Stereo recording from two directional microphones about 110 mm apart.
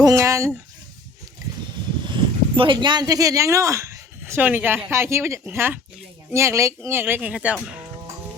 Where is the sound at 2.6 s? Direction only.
45° right (ahead or behind); by 3.9 s 25° right (ahead or behind).